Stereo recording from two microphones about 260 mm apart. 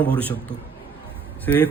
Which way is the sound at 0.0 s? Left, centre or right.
Centre.